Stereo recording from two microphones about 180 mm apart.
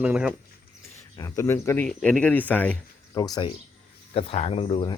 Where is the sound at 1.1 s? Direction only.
20° left (ahead or behind).